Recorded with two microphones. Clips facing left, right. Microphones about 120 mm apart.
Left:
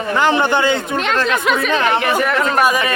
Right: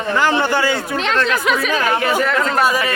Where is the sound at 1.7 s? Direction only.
25° left (ahead or behind).